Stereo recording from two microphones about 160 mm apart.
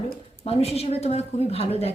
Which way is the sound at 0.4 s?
40° left (ahead or behind).